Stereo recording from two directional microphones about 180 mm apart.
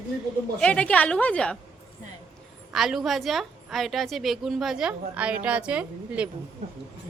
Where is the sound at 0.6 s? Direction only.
5° left (ahead or behind).